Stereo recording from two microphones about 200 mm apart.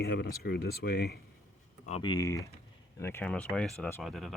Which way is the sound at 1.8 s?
25° left (ahead or behind).